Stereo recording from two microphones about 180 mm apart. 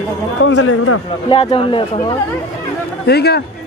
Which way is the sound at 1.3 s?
30° left (ahead or behind).